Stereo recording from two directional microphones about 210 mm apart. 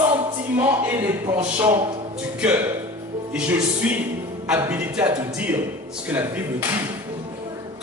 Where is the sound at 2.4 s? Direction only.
10° right (ahead or behind).